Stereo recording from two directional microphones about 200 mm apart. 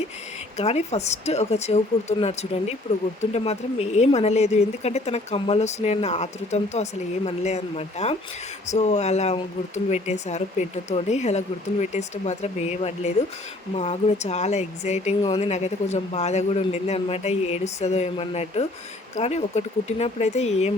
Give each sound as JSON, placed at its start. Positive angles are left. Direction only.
{"t": 0.5, "sound": "speech", "side_deg": 30}